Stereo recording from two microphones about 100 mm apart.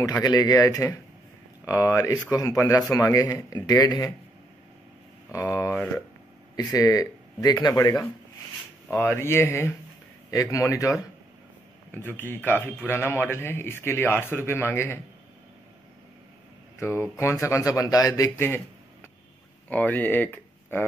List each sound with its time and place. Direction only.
0.0 s speech: 40° left (ahead or behind)
5.3 s speech: 30° left (ahead or behind)
8.9 s speech: 25° left (ahead or behind)
11.9 s speech: 20° left (ahead or behind)
16.8 s speech: 25° left (ahead or behind)
19.7 s speech: 15° left (ahead or behind)